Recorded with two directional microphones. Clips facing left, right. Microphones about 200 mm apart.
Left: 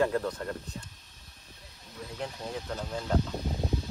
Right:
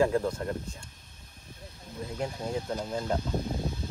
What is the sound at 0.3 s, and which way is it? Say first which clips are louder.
Speech: right 3 dB; 25° right (ahead or behind).